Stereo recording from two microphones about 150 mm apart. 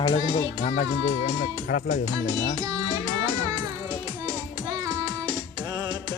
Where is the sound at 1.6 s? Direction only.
60° left (ahead or behind).